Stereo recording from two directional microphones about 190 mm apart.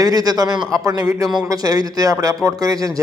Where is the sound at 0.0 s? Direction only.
20° right (ahead or behind).